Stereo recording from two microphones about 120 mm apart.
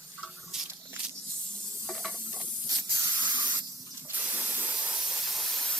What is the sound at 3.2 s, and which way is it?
Spray, 15° right (ahead or behind).